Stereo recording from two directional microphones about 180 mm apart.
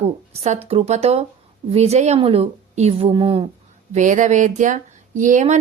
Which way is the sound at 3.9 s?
45° right (ahead or behind).